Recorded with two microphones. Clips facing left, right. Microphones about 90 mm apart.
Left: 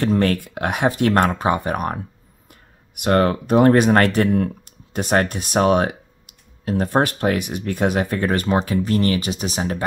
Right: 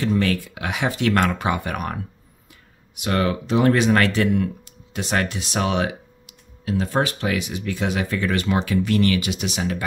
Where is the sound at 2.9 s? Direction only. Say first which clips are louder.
Left 5 dB; 50° left (ahead or behind).